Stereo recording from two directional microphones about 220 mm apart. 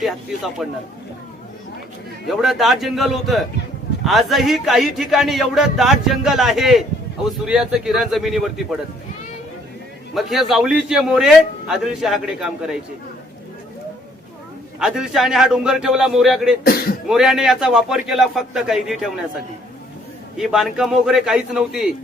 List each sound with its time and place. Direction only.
0.0 s a man's voice: centre (ahead or behind)
2.2 s a man's voice: centre (ahead or behind)
10.2 s a man's voice: centre (ahead or behind)
14.8 s a man's voice: 5° right (ahead or behind)
16.6 s speech: 45° left (ahead or behind)
17.1 s a man's voice: centre (ahead or behind)
20.3 s a man's voice: centre (ahead or behind)